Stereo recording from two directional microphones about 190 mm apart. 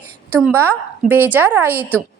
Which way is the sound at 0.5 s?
10° right (ahead or behind).